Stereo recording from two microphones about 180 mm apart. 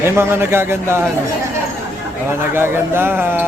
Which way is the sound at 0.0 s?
15° right (ahead or behind).